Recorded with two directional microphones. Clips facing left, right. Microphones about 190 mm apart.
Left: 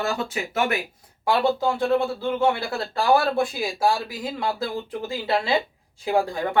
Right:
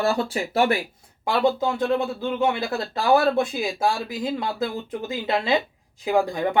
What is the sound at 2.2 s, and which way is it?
Speech, 20° right (ahead or behind).